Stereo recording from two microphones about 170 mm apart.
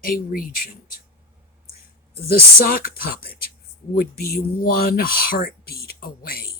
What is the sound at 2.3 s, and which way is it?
Speech, 60° left (ahead or behind).